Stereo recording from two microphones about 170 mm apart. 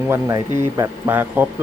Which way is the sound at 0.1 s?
15° right (ahead or behind).